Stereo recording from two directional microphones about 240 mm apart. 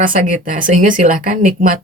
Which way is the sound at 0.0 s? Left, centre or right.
Right.